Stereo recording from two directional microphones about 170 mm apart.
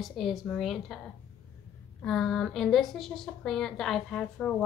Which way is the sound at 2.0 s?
Centre (ahead or behind).